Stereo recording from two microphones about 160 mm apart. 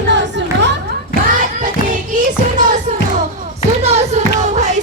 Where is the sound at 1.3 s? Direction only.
55° right (ahead or behind).